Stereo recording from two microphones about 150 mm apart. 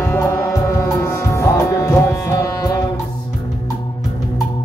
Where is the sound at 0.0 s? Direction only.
15° left (ahead or behind).